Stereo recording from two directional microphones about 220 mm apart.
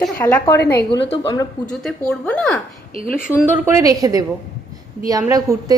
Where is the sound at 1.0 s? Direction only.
25° left (ahead or behind).